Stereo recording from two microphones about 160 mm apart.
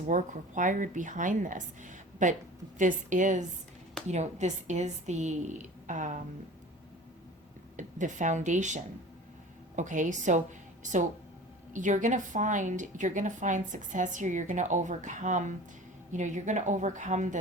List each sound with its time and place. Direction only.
0.1 s a woman's voice: 50° right (ahead or behind)
7.8 s a woman's voice: 50° right (ahead or behind)